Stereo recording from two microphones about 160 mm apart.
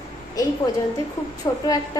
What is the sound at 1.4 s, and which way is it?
Speech, 20° left (ahead or behind).